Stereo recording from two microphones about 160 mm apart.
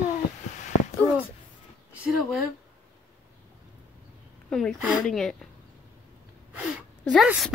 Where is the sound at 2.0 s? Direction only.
5° right (ahead or behind).